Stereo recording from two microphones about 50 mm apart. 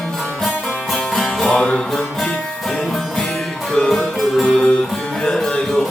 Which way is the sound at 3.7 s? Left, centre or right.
Centre.